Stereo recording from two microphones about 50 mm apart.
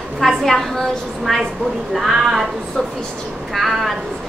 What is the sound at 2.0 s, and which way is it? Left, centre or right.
Speech, centre.